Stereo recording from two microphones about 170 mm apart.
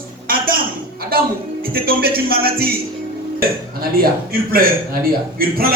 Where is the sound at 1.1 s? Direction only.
60° right (ahead or behind).